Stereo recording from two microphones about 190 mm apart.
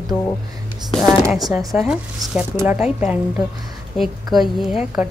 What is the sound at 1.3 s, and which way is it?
A woman's voice, centre (ahead or behind).